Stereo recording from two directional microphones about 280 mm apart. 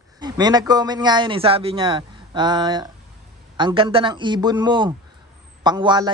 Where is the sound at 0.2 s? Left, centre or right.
Centre.